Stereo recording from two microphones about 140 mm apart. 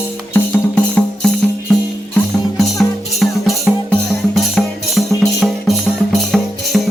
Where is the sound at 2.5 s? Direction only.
Centre (ahead or behind).